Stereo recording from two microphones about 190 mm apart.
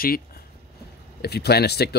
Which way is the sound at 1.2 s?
60° left (ahead or behind).